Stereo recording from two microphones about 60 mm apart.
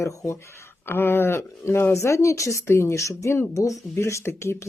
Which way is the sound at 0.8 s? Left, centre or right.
Left.